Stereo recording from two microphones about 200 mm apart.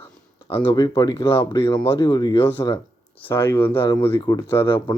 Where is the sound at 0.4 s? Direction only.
25° left (ahead or behind).